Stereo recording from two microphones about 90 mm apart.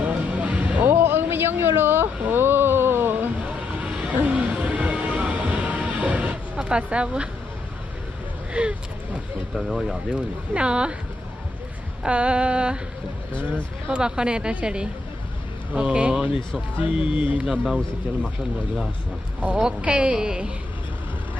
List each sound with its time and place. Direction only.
0.0 s music: 15° right (ahead or behind)
8.6 s speech: 15° right (ahead or behind)
12.0 s speech: 15° right (ahead or behind)
13.9 s speech: 10° right (ahead or behind)
19.6 s speech: 10° right (ahead or behind)